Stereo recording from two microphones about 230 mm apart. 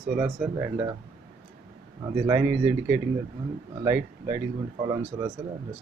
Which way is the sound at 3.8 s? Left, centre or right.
Centre.